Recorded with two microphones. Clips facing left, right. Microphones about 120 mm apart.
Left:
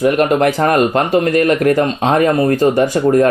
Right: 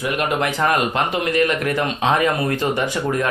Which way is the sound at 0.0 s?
40° left (ahead or behind).